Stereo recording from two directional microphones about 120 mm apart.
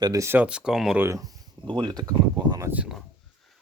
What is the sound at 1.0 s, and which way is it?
Speech, 25° right (ahead or behind).